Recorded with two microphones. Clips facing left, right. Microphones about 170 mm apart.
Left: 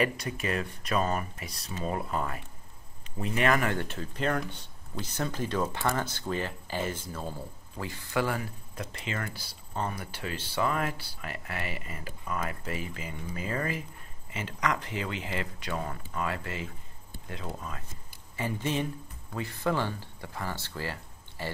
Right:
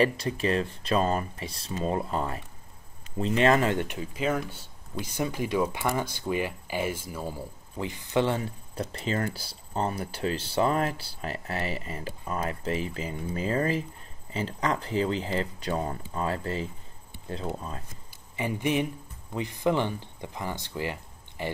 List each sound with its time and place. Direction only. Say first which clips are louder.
0.0 s speech: right 5 dB; 30° right (ahead or behind)
18.3 s speech: right 4 dB; 15° right (ahead or behind)